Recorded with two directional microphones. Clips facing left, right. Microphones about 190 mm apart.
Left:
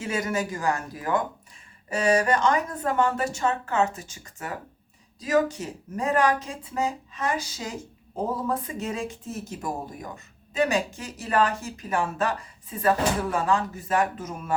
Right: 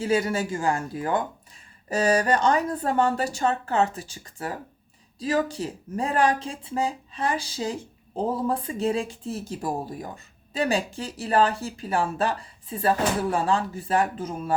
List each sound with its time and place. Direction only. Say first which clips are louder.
0.0 s speech: right 4 dB; 30° right (ahead or behind)